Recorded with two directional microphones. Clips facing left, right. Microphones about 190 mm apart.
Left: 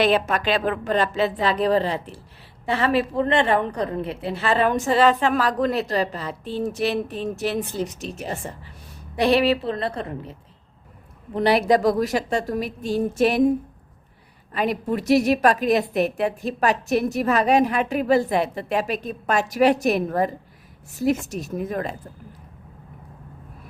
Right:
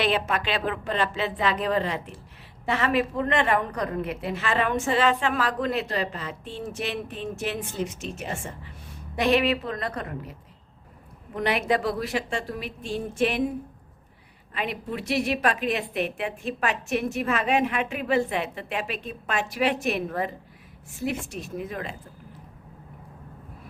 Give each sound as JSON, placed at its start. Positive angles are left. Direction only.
{"t": 0.0, "sound": "a woman's voice", "side_deg": 40}
{"t": 11.3, "sound": "a woman's voice", "side_deg": 35}
{"t": 14.5, "sound": "a woman's voice", "side_deg": 40}